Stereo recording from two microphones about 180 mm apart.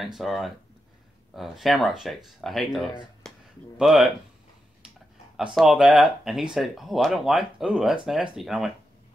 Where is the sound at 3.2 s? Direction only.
5° left (ahead or behind).